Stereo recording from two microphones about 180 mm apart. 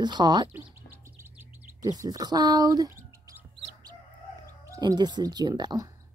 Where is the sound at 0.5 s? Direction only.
15° right (ahead or behind).